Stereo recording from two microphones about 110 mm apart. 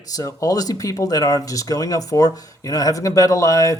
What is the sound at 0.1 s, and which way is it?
A man's voice, 30° left (ahead or behind).